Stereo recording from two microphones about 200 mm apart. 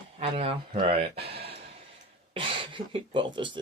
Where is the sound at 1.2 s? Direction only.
50° right (ahead or behind).